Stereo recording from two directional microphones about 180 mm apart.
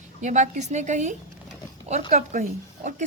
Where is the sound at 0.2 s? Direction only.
40° right (ahead or behind).